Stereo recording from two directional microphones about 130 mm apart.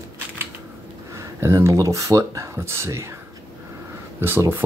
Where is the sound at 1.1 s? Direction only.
20° right (ahead or behind).